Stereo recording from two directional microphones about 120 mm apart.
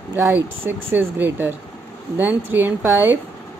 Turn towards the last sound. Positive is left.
turn(degrees=-15)  # may be behind; listen again after turning